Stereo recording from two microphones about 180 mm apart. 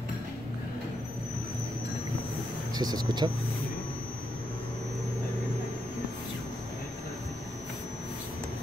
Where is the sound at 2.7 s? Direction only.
20° right (ahead or behind).